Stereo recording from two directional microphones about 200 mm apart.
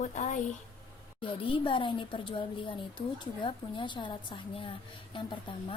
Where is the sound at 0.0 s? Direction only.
40° left (ahead or behind).